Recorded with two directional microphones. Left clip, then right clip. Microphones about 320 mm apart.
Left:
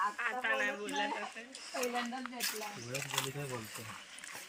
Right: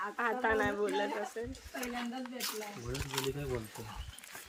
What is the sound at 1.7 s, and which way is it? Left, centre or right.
Speech, centre.